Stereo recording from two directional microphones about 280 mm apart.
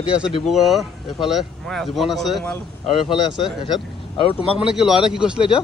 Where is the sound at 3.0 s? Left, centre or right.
Centre.